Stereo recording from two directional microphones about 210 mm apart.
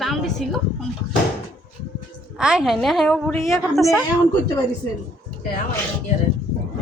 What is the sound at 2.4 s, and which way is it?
A woman's voice, 5° right (ahead or behind).